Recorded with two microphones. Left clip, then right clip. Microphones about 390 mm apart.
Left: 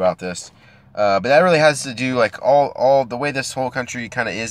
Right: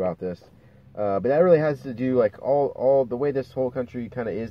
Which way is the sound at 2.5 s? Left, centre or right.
Left.